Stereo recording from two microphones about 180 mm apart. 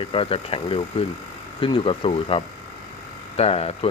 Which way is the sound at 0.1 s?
30° left (ahead or behind).